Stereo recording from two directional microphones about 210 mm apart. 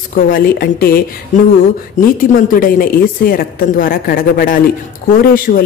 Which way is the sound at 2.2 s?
40° left (ahead or behind).